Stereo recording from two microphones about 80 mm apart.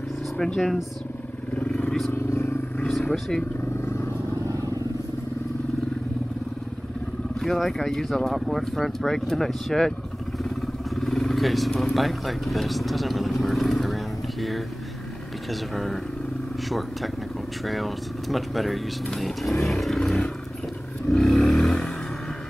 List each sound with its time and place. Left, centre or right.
0.4 s speech: centre
1.5 s vehicle: centre
2.1 s vehicle: left
2.9 s speech: centre
7.3 s speech: centre
11.0 s speech: centre
15.7 s speech: centre
17.6 s speech: centre
21.1 s vehicle: centre